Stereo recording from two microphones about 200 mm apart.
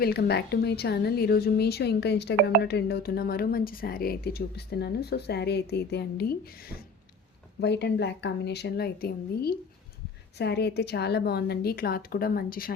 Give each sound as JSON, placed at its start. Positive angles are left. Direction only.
{"t": 0.0, "sound": "a woman's voice", "side_deg": 55}